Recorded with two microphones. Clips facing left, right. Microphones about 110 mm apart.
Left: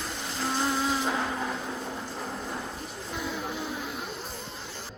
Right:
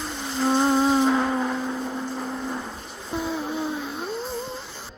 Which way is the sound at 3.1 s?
30° right (ahead or behind).